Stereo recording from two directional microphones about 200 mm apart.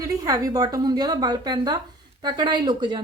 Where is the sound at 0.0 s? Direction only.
15° right (ahead or behind).